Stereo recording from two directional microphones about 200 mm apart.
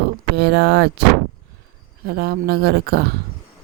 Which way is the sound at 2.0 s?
50° right (ahead or behind).